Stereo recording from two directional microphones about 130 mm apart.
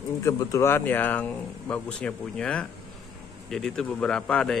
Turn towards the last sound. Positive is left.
turn(degrees=5)  # may be behind; listen again after turning